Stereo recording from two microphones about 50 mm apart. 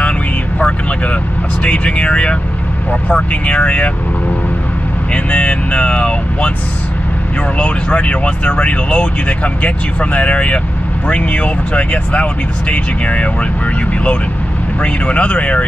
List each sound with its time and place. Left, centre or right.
1.6 s speech: left
5.1 s speech: left
7.5 s speech: left
14.8 s speech: left